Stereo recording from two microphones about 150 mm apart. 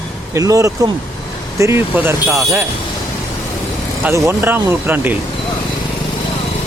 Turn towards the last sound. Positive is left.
turn(degrees=-15)  # may be behind; listen again after turning